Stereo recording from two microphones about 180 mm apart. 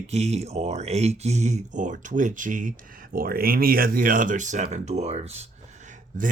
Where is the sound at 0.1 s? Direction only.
35° right (ahead or behind).